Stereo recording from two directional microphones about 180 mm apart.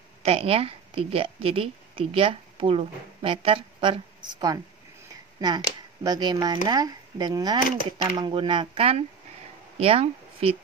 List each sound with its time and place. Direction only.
0.2 s a woman's voice: 35° right (ahead or behind)
6.0 s speech: 20° right (ahead or behind)